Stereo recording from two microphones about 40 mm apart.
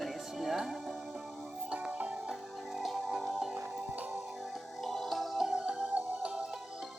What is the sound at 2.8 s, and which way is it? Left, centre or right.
Music, centre.